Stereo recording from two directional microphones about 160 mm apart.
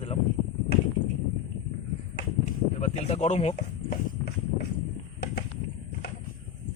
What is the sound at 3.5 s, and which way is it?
Speech, 80° left.